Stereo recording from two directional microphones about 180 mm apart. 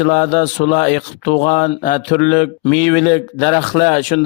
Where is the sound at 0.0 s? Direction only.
50° left (ahead or behind).